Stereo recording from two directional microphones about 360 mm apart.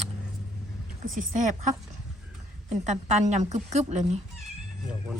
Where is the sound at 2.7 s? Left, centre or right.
Centre.